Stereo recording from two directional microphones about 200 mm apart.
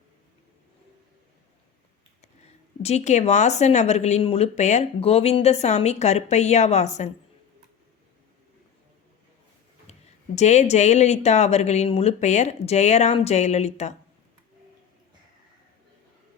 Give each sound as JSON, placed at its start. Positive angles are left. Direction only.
{"t": 2.8, "sound": "speech", "side_deg": 35}
{"t": 9.9, "sound": "a sound", "side_deg": 35}
{"t": 10.3, "sound": "speech", "side_deg": 35}